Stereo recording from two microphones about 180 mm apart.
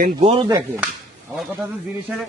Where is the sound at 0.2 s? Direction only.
35° right (ahead or behind).